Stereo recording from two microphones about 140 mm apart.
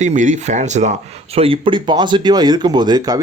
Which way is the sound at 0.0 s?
60° right (ahead or behind).